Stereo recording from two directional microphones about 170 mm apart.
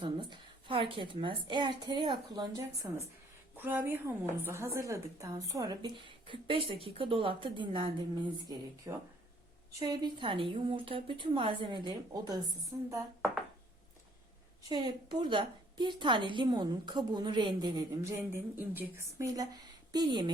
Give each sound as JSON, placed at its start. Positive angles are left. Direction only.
{"t": 0.0, "sound": "a woman's voice", "side_deg": -30}
{"t": 2.8, "sound": "a woman's voice", "side_deg": -15}
{"t": 14.7, "sound": "a woman's voice", "side_deg": -25}
{"t": 18.3, "sound": "a woman's voice", "side_deg": -10}